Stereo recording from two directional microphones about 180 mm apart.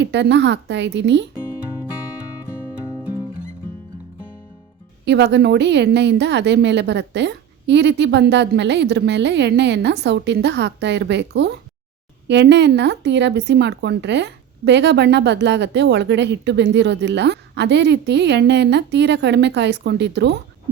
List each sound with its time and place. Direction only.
0.0 s a woman's voice: 75° right (ahead or behind)
5.0 s speech: 75° right (ahead or behind)